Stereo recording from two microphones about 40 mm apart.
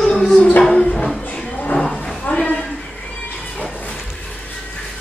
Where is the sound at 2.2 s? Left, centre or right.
Left.